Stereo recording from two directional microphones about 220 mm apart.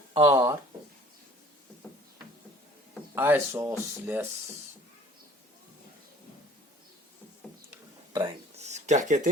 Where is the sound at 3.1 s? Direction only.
10° right (ahead or behind).